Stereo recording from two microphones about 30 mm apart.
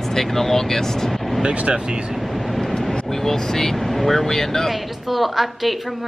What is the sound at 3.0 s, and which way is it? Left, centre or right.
Speech, centre.